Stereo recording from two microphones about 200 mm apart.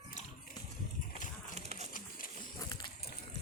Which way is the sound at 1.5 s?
35° right (ahead or behind).